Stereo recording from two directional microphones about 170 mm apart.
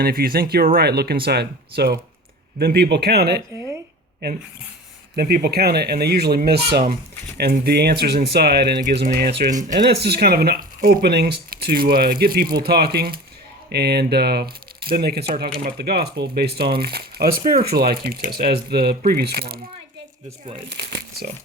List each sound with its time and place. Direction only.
0.0 s speech: 60° right (ahead or behind)
5.1 s speech: 65° right (ahead or behind)
9.5 s speech: 50° right (ahead or behind)
9.9 s speech: 70° right (ahead or behind)
20.7 s speech: 80° right